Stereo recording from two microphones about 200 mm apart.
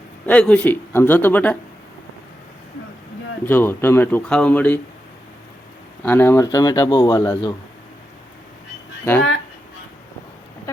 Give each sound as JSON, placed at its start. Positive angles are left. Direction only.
{"t": 0.3, "sound": "speech", "side_deg": 5}
{"t": 3.4, "sound": "speech", "side_deg": 10}
{"t": 6.0, "sound": "speech", "side_deg": 10}